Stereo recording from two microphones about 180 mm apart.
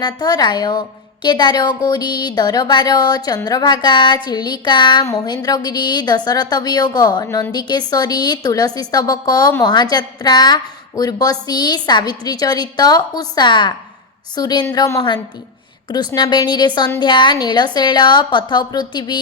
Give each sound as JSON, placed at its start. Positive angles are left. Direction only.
{"t": 0.0, "sound": "a woman's voice", "side_deg": 20}